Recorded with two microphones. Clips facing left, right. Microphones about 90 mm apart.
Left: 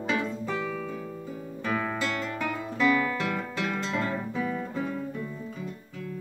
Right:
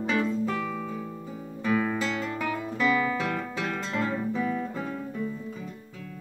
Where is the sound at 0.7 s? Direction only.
5° right (ahead or behind).